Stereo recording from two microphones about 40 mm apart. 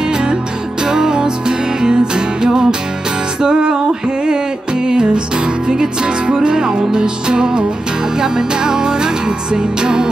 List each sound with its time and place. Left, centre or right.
0.8 s music: centre
4.8 s music: right